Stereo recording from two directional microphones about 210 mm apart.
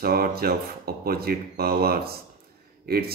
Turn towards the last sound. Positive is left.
turn(degrees=-45)  # may be behind; listen again after turning